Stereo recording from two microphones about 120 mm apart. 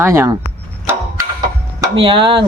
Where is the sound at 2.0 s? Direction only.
50° right (ahead or behind).